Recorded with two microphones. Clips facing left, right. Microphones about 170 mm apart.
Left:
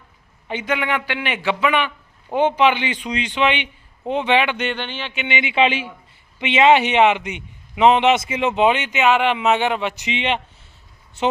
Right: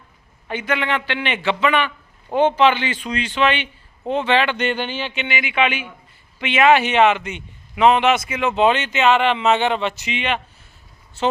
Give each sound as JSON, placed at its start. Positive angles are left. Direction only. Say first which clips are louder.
{"t": 0.4, "sound": "a man's voice", "louder": "even", "side_deg": 15}
{"t": 4.5, "sound": "speech", "louder": "right 3 dB", "side_deg": 0}
{"t": 5.3, "sound": "a man's voice", "louder": "left 3 dB", "side_deg": 25}